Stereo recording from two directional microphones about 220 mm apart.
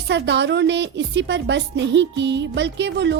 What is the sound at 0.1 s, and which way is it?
A woman's voice, 55° right (ahead or behind).